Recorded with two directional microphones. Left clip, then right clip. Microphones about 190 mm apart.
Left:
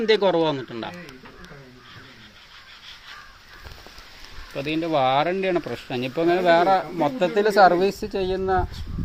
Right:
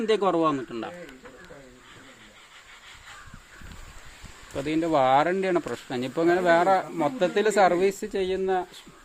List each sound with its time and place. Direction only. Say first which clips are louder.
0.0 s speech: left 4 dB; 10° right (ahead or behind)
4.5 s speech: left 1 dB; 20° right (ahead or behind)
7.6 s speech: left 6 dB; centre (ahead or behind)